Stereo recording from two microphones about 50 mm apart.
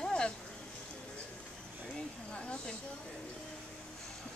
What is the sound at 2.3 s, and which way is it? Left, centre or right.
Speech, left.